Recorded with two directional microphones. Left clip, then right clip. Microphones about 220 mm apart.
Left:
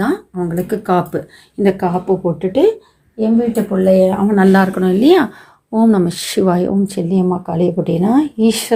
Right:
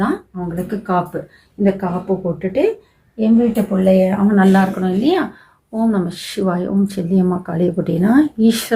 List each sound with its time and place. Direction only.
0.0 s speech: 40° left (ahead or behind)
3.2 s speech: 15° left (ahead or behind)
4.3 s speech: 35° left (ahead or behind)
6.8 s speech: 10° left (ahead or behind)